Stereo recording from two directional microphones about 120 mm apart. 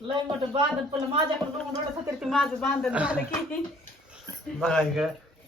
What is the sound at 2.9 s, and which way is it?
Speech, 10° right (ahead or behind).